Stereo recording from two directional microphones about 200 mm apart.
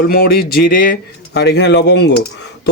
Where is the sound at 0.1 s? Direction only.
50° left (ahead or behind).